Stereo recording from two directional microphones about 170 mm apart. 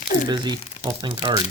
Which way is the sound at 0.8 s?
30° right (ahead or behind).